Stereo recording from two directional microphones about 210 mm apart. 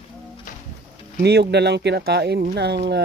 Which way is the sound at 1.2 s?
50° right (ahead or behind).